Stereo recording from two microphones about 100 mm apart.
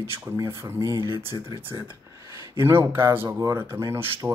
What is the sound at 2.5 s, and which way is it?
Speech, 25° right (ahead or behind).